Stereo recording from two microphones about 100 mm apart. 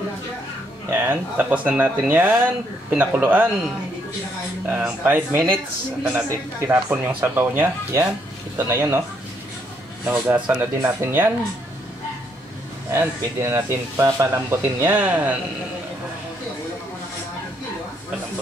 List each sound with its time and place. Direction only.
0.8 s speech: 20° right (ahead or behind)
4.6 s speech: 15° right (ahead or behind)
10.0 s speech: 20° right (ahead or behind)
12.9 s speech: 25° right (ahead or behind)